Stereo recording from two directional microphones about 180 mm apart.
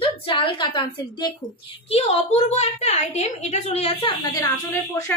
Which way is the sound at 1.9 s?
40° left (ahead or behind).